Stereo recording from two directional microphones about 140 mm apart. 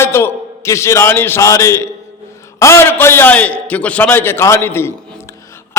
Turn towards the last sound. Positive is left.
turn(degrees=15)  # may be behind; listen again after turning